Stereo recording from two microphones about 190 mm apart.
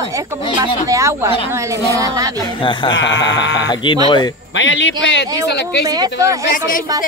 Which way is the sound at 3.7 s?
25° left (ahead or behind).